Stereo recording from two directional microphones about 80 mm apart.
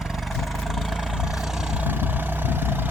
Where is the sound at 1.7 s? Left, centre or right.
Right.